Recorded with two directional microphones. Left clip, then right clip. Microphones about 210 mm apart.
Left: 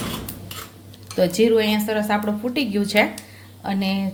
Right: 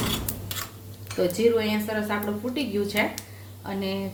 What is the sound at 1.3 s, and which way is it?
A woman's voice, 45° left (ahead or behind).